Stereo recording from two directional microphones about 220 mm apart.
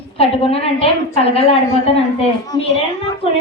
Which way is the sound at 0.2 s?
25° left (ahead or behind).